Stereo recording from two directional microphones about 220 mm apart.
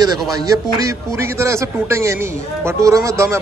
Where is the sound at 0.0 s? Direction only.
15° right (ahead or behind).